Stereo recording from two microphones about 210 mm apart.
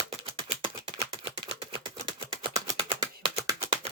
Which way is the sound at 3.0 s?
20° right (ahead or behind).